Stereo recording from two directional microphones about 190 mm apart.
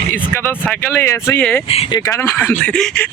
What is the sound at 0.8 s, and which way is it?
Speech, 15° left (ahead or behind).